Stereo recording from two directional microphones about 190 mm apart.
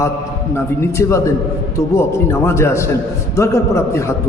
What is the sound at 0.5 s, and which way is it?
A man's voice, 15° left (ahead or behind).